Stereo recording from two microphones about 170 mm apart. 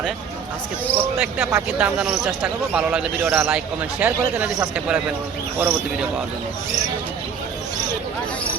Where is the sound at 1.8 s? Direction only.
5° right (ahead or behind).